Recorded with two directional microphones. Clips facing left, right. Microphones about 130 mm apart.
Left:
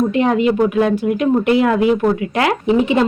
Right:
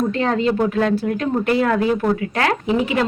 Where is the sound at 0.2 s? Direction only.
15° left (ahead or behind).